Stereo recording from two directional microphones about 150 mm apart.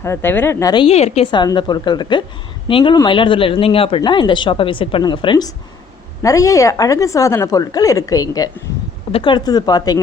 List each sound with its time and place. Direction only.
0.0 s speech: 15° left (ahead or behind)
0.7 s speech: 35° left (ahead or behind)
6.2 s a woman's voice: 20° left (ahead or behind)